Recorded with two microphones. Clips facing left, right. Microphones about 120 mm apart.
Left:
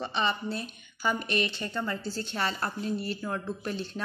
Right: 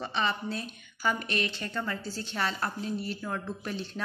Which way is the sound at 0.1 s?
20° left (ahead or behind).